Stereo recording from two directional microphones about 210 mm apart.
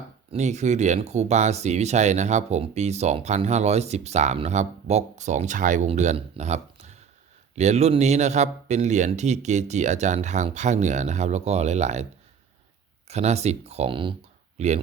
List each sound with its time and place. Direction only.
0.3 s speech: 35° right (ahead or behind)
13.1 s speech: 30° right (ahead or behind)